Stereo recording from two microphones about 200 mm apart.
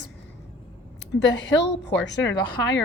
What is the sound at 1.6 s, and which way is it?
A woman's voice, 60° left (ahead or behind).